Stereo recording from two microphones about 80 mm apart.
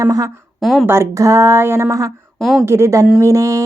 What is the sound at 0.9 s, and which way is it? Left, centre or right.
Speech, right.